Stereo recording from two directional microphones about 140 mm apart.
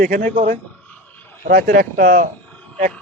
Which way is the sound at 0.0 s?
90° right.